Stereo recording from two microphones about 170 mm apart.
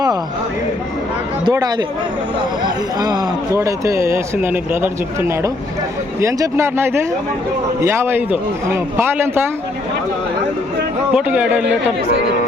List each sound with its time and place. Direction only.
1.5 s speech: 25° right (ahead or behind)
11.1 s speech: 5° right (ahead or behind)